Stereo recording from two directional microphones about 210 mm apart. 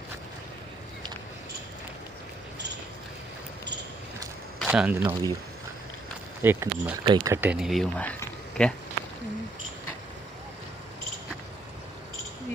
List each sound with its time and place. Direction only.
4.6 s speech: 5° right (ahead or behind)
6.4 s speech: 10° right (ahead or behind)
7.0 s speech: 20° right (ahead or behind)
7.4 s speech: 5° right (ahead or behind)